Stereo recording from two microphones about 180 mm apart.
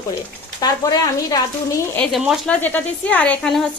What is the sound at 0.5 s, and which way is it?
Speech, 20° left (ahead or behind).